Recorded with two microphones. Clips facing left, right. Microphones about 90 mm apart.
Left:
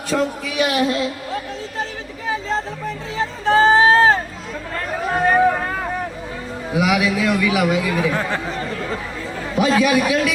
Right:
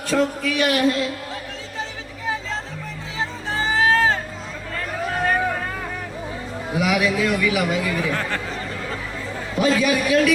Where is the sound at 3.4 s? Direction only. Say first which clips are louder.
Left 12 dB; 60° left (ahead or behind).